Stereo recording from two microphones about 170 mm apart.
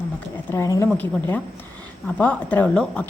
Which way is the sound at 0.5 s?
20° left (ahead or behind).